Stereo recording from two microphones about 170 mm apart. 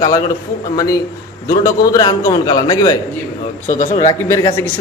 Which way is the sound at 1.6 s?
20° left (ahead or behind).